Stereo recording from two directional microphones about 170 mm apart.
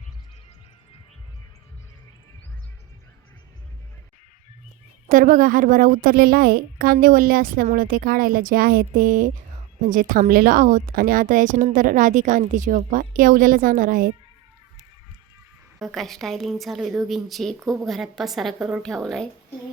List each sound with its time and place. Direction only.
5.0 s a woman's voice: 50° right (ahead or behind)
15.8 s a woman's voice: centre (ahead or behind)